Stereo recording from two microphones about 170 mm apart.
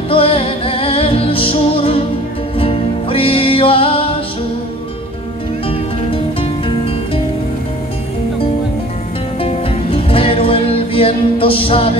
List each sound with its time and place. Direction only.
0.1 s music: 35° left (ahead or behind)
5.7 s music: 35° left (ahead or behind)
9.4 s music: 35° left (ahead or behind)